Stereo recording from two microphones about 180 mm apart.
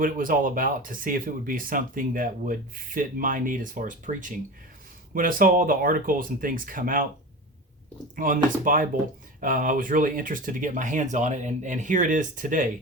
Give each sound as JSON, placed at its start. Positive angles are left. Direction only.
{"t": 0.0, "sound": "speech", "side_deg": -50}
{"t": 8.1, "sound": "speech", "side_deg": -50}